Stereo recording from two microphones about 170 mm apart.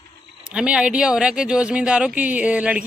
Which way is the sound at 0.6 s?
5° right (ahead or behind).